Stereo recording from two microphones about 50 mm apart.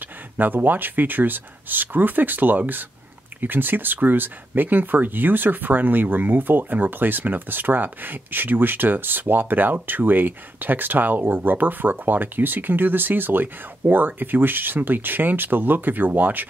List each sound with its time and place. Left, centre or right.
0.4 s speech: right